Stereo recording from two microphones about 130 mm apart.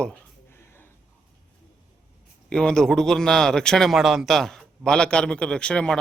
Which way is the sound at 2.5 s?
5° left (ahead or behind).